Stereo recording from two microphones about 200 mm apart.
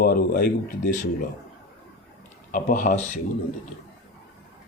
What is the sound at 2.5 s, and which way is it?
Speech, 40° left (ahead or behind).